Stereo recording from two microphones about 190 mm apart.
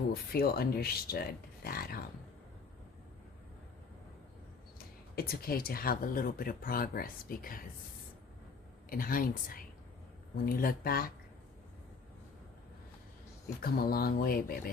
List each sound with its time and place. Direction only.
0.1 s speech: 55° left (ahead or behind)
5.1 s speech: 50° left (ahead or behind)
8.9 s speech: 50° left (ahead or behind)
13.6 s speech: 50° left (ahead or behind)